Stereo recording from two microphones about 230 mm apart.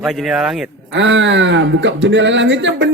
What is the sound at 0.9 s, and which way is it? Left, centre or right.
Speech, right.